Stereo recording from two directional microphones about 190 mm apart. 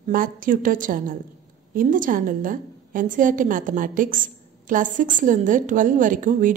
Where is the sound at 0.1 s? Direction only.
45° right (ahead or behind).